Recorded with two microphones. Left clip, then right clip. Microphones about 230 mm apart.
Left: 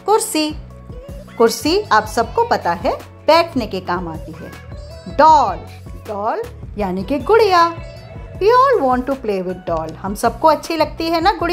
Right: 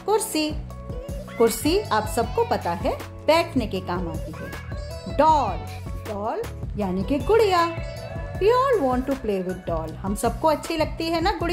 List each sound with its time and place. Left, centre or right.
0.0 s music: centre
1.6 s a child's voice: centre
2.2 s speech: centre
2.7 s a child's voice: centre
5.1 s a child's voice: centre